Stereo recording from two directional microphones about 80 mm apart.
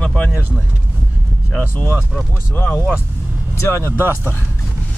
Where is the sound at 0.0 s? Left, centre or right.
Centre.